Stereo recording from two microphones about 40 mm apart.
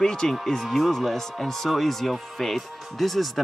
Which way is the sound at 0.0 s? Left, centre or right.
Centre.